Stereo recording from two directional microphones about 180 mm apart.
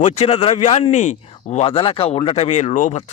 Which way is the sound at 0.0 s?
40° left (ahead or behind).